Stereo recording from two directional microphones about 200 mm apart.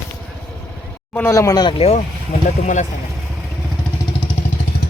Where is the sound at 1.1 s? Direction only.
15° left (ahead or behind).